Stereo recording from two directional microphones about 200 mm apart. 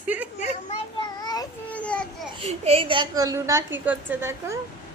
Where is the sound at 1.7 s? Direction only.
5° left (ahead or behind).